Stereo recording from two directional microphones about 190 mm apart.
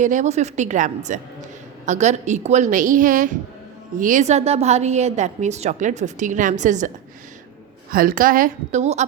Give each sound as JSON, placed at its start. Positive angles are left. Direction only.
{"t": 0.0, "sound": "a woman's voice", "side_deg": -40}